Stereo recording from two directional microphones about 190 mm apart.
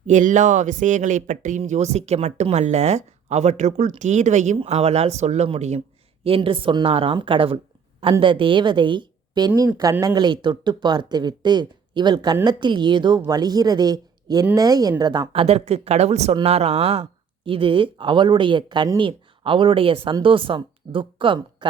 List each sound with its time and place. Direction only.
0.1 s speech: 40° right (ahead or behind); by 21.7 s 25° right (ahead or behind)